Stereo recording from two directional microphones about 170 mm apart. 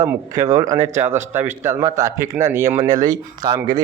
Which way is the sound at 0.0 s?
20° right (ahead or behind).